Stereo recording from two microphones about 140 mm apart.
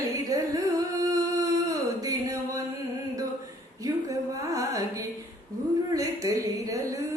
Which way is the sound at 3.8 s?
25° right (ahead or behind).